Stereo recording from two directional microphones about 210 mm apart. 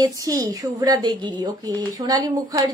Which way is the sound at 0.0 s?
15° right (ahead or behind).